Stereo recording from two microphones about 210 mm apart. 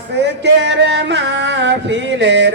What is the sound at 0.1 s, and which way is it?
Music, 55° right (ahead or behind).